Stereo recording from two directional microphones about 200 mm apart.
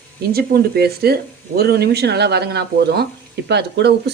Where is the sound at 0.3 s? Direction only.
50° right (ahead or behind).